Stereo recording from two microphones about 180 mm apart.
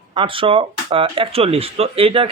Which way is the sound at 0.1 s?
30° right (ahead or behind).